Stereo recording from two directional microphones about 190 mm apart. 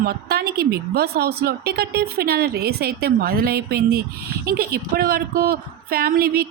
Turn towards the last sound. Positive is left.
turn(degrees=-55)  # may be behind; listen again after turning